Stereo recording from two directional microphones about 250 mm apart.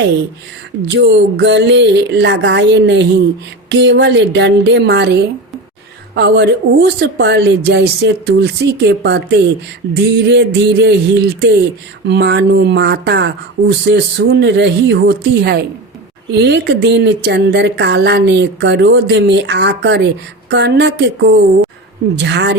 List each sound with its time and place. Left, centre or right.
0.9 s speech: right